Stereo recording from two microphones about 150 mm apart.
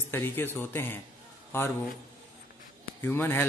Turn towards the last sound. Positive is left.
turn(degrees=15)  # may be behind; listen again after turning